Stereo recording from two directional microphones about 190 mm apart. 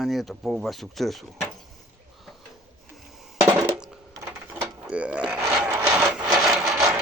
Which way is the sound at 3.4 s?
10° right (ahead or behind).